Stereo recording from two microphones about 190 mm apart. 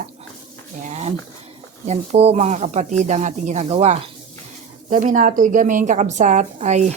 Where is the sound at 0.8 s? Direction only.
35° right (ahead or behind).